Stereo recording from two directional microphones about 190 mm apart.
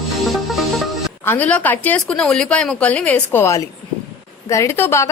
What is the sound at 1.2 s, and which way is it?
A woman's voice, 10° left (ahead or behind).